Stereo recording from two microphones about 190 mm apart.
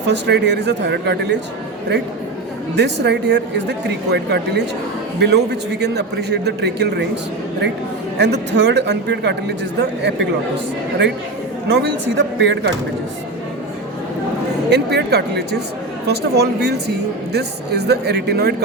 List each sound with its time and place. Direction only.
0.1 s speech: 65° right (ahead or behind)
2.7 s speech: 65° right (ahead or behind)
8.2 s speech: 65° right (ahead or behind)
11.7 s speech: 65° right (ahead or behind)
14.7 s speech: 60° right (ahead or behind)